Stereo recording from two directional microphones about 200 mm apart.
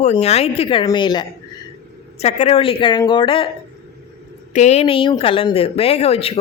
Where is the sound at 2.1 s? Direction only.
35° left (ahead or behind).